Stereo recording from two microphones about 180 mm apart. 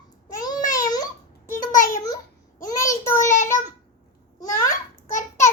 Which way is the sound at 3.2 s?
45° left (ahead or behind).